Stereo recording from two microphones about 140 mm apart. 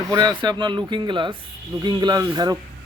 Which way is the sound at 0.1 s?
30° right (ahead or behind).